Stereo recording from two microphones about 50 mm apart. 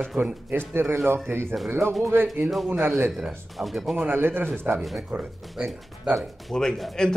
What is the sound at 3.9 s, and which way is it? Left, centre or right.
Speech, right.